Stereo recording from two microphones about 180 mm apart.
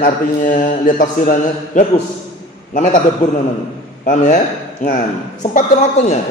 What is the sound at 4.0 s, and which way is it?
Speech, 45° left (ahead or behind).